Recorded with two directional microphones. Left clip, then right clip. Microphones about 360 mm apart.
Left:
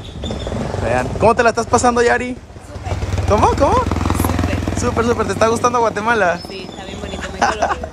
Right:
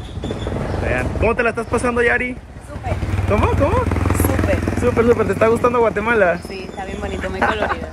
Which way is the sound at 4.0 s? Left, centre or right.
Left.